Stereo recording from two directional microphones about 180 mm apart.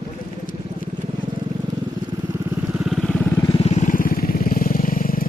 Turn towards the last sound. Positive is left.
turn(degrees=50)  # may be behind; listen again after turning